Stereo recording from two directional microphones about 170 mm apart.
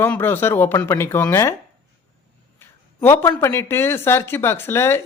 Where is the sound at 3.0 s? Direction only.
15° left (ahead or behind).